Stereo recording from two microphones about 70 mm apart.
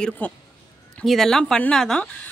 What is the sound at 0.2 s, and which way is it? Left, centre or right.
Speech, left.